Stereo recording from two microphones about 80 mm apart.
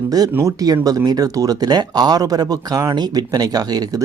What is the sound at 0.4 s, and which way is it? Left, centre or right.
Speech, right.